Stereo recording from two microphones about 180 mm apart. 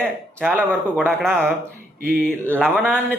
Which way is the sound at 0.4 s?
10° right (ahead or behind).